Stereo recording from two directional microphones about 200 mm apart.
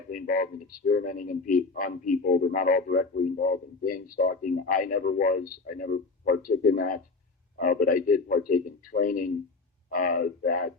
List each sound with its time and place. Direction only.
0.1 s a man's voice: 45° left (ahead or behind)